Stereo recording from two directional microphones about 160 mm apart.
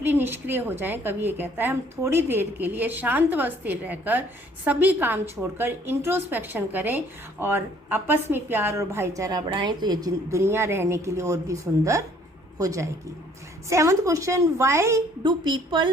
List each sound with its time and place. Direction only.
0.0 s a woman's voice: 15° right (ahead or behind); by 15.9 s 30° right (ahead or behind)